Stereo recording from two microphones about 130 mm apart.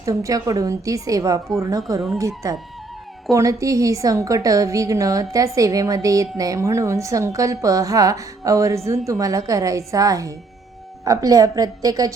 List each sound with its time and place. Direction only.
0.0 s a woman's voice: 25° right (ahead or behind)